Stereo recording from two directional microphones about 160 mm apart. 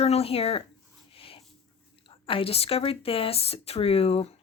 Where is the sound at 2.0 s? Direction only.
35° left (ahead or behind).